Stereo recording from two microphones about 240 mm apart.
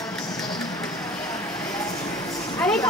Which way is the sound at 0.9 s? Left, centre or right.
Centre.